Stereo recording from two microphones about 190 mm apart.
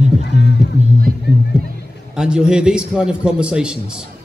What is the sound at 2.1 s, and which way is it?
A man's voice, 5° right (ahead or behind).